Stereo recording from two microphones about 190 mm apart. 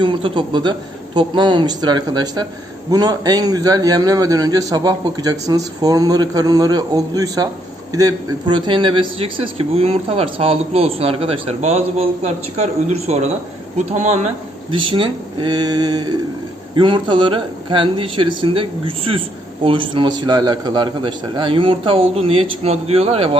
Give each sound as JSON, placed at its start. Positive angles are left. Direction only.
{"t": 0.0, "sound": "a man's voice", "side_deg": -25}
{"t": 14.7, "sound": "a man's voice", "side_deg": -25}